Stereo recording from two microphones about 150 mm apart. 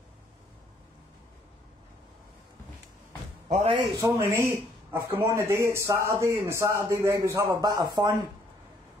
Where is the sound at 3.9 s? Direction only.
20° right (ahead or behind).